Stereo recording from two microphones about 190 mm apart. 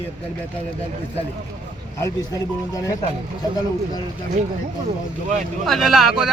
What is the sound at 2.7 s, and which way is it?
Speech, 20° left (ahead or behind).